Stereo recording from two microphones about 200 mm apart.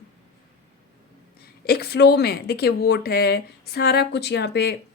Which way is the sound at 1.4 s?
50° left (ahead or behind).